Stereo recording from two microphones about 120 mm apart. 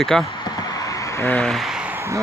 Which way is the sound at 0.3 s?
35° left (ahead or behind).